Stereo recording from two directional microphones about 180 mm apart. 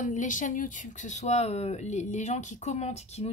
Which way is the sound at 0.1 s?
45° left (ahead or behind).